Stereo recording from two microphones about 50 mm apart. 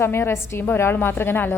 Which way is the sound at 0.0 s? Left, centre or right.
Left.